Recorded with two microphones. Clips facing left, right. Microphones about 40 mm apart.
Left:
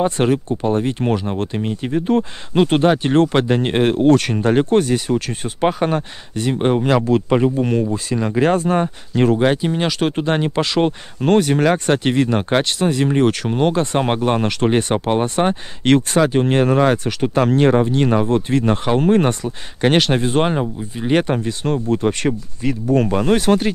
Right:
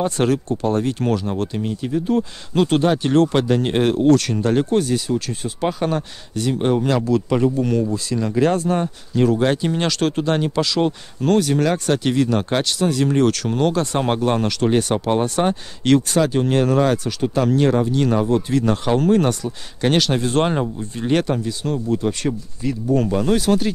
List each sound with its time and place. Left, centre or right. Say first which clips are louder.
0.0 s speech: left 2 dB; left
2.5 s speech: left 2 dB; left
9.4 s speech: left 2 dB; centre; by 17.1 s left
17.2 s speech: left 2 dB; left
20.2 s speech: left 1 dB; centre
21.3 s speech: left 2 dB; left